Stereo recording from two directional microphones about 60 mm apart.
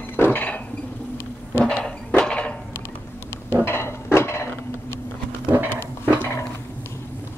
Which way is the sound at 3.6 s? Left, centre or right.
Left.